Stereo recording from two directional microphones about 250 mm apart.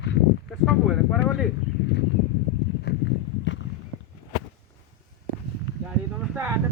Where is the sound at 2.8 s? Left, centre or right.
Left.